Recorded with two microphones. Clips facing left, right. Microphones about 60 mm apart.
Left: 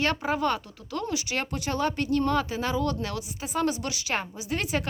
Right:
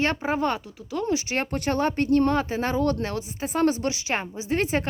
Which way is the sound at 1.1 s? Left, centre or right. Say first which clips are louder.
Right 6 dB; right.